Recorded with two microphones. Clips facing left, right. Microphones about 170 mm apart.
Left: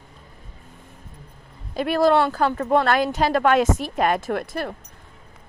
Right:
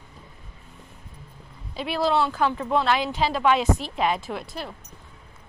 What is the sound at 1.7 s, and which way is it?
Speech, 50° left (ahead or behind).